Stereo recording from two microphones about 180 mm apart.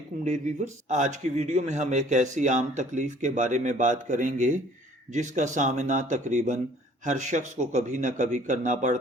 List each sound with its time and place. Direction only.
0.3 s a man's voice: 40° right (ahead or behind)